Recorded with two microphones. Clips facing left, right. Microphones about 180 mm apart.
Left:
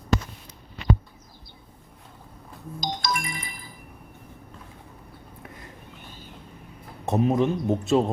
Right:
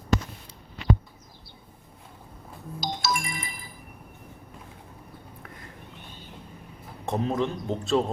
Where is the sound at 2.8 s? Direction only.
5° right (ahead or behind).